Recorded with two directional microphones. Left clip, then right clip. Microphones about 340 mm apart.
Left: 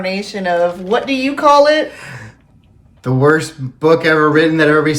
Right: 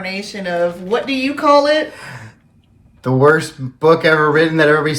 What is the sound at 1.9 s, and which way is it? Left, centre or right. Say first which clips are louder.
Speech: left 1 dB; centre.